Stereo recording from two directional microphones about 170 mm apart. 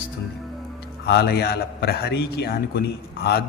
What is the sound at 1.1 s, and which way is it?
A man's voice, 70° left (ahead or behind).